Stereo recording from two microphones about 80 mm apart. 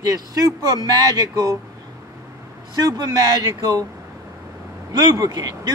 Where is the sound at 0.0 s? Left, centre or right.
Right.